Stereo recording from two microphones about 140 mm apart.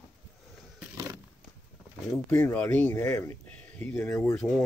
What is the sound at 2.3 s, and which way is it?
Speech, 15° left (ahead or behind).